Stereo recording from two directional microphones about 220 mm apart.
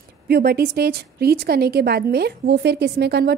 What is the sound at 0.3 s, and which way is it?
A woman's voice, 45° right (ahead or behind).